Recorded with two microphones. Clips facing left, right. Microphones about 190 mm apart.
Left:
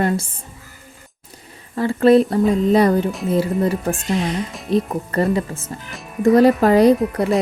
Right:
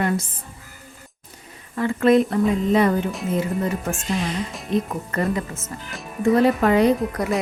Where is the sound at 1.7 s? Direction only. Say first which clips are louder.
Left 4 dB; 30° left (ahead or behind).